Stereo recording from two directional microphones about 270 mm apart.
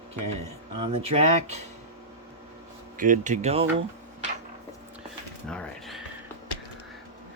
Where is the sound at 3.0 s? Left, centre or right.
Right.